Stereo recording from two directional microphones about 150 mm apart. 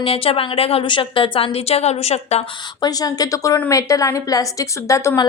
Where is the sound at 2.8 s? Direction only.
25° left (ahead or behind).